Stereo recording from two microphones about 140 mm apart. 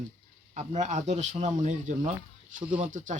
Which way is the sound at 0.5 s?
55° right (ahead or behind).